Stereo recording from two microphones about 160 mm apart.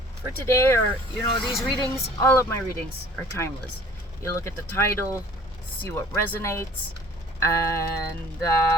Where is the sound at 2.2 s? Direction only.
15° left (ahead or behind).